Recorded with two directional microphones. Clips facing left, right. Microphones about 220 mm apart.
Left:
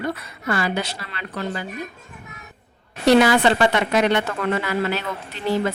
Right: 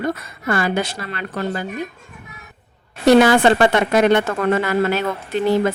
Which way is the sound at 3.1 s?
50° right (ahead or behind).